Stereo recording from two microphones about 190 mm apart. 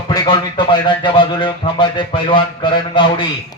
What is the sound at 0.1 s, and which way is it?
A man's voice, 20° left (ahead or behind).